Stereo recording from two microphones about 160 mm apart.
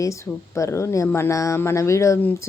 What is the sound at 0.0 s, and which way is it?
Speech, 20° left (ahead or behind).